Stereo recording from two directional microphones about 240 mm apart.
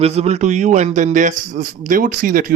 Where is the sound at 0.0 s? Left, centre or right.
Right.